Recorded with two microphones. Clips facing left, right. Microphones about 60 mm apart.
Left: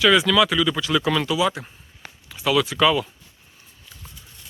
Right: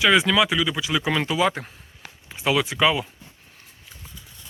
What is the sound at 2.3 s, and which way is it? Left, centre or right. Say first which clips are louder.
Speech: left 2 dB; right.